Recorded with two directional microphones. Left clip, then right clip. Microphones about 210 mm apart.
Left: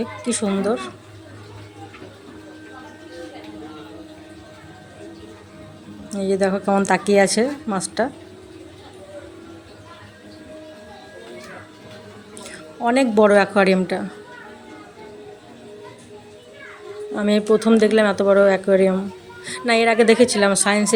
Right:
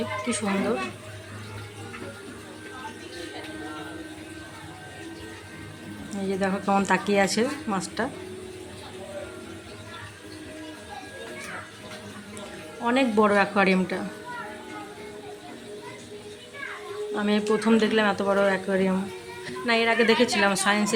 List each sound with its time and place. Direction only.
0.3 s a woman's voice: 20° left (ahead or behind)
6.1 s a woman's voice: 20° left (ahead or behind)
12.8 s a woman's voice: 20° left (ahead or behind)
17.2 s a woman's voice: 25° left (ahead or behind)